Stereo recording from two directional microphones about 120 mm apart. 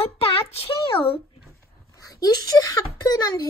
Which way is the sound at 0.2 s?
50° left (ahead or behind).